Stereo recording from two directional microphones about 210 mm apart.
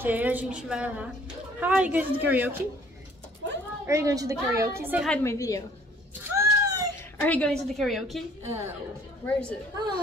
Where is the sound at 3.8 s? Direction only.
15° right (ahead or behind).